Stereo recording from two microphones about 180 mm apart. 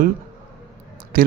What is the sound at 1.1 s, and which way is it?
Speech, 55° right (ahead or behind).